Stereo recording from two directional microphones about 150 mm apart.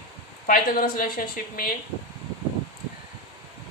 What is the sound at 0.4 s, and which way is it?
Speech, 70° left (ahead or behind).